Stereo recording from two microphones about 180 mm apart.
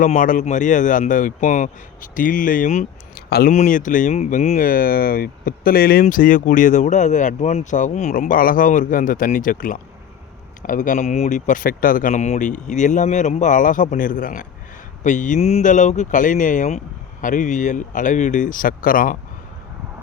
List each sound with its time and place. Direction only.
0.0 s speech: 45° left (ahead or behind)
3.2 s speech: 60° left (ahead or behind)
3.5 s speech: 45° left (ahead or behind)